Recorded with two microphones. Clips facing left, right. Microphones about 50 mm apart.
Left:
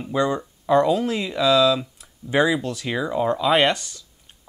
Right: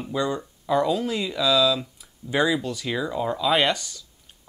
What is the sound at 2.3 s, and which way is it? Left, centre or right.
Speech, centre.